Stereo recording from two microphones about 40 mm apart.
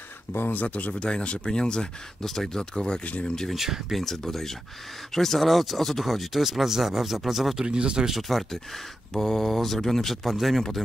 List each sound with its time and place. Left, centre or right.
0.3 s speech: left
0.6 s speech: left
0.9 s speech: left
2.2 s speech: centre
2.7 s speech: left
3.4 s speech: centre
4.0 s speech: centre
7.6 s speech: right
8.1 s speech: centre